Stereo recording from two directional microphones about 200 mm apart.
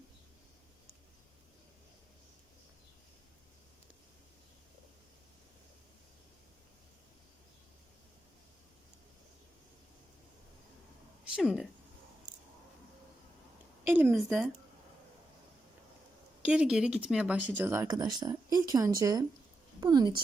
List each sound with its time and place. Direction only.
11.3 s speech: centre (ahead or behind)
13.8 s speech: 10° right (ahead or behind)
16.4 s a woman's voice: 5° right (ahead or behind); by 20.2 s 20° right (ahead or behind)